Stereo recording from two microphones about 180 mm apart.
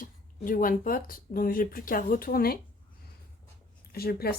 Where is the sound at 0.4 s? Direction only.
50° left (ahead or behind).